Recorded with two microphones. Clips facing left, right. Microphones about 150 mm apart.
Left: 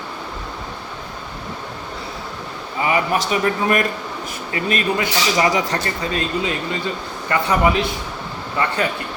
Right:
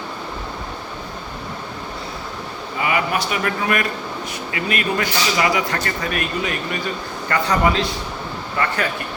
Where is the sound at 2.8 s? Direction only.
35° left (ahead or behind).